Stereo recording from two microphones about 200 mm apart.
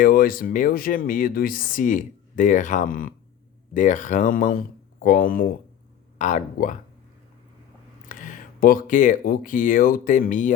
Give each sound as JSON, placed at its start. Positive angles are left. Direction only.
{"t": 0.0, "sound": "speech", "side_deg": 45}
{"t": 8.1, "sound": "speech", "side_deg": 40}